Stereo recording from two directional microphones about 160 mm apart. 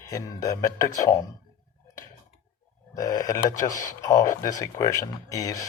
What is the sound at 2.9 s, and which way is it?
Speech, 20° left (ahead or behind).